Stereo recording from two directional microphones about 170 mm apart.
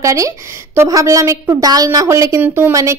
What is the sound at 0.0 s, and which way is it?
A woman's voice, 20° right (ahead or behind).